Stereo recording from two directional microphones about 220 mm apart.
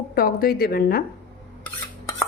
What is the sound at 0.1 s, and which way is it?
Speech, 40° left (ahead or behind).